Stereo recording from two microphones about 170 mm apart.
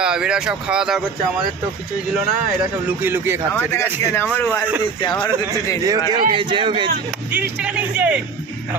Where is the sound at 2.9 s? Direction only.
10° right (ahead or behind).